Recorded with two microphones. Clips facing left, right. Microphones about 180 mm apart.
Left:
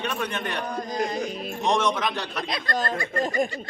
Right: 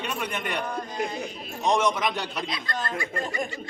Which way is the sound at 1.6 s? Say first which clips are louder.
Even; 5° right (ahead or behind).